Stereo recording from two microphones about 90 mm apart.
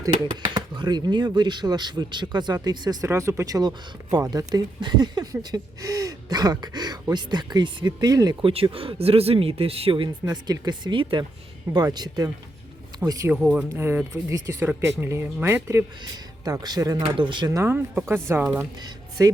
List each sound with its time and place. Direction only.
0.5 s speech: 55° right (ahead or behind)
3.1 s speech: 30° right (ahead or behind)
8.4 s speech: 80° right
10.2 s speech: 50° right (ahead or behind); by 11.3 s 65° right (ahead or behind)
11.7 s speech: 50° right (ahead or behind)
13.3 s speech: 10° right (ahead or behind)
13.7 s speech: 25° right (ahead or behind)
14.1 s speech: 40° right (ahead or behind)
16.4 s speech: 45° right (ahead or behind)
17.2 s speech: 60° right (ahead or behind)
17.7 s speech: 20° right (ahead or behind)
19.2 s speech: 40° right (ahead or behind)